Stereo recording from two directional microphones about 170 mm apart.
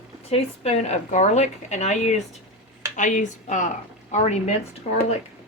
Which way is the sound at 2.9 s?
45° left (ahead or behind).